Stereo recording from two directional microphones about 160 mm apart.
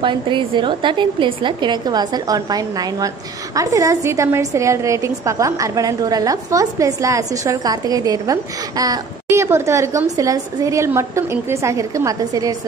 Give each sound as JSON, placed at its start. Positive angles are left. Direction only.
{"t": 0.0, "sound": "a woman's voice", "side_deg": -30}